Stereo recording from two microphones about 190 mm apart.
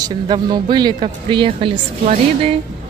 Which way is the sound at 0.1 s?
25° right (ahead or behind).